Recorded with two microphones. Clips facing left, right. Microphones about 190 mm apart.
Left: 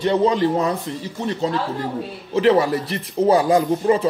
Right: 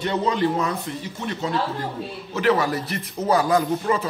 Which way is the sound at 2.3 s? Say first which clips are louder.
Left 5 dB; 30° left (ahead or behind).